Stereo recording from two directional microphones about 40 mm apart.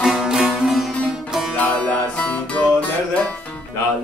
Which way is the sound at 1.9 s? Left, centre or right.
Left.